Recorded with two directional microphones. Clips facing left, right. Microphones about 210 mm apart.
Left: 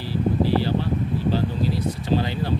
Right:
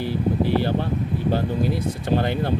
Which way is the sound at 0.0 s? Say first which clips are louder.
Even; 55° right (ahead or behind).